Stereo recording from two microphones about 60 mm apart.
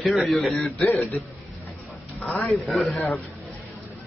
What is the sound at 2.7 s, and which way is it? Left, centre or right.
Speech, centre.